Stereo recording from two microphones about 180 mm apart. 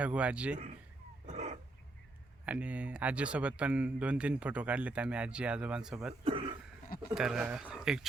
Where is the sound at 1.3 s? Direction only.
40° right (ahead or behind).